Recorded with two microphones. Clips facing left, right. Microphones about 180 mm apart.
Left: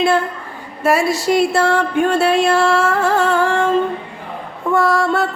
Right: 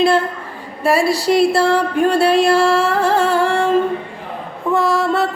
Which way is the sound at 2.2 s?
Centre (ahead or behind).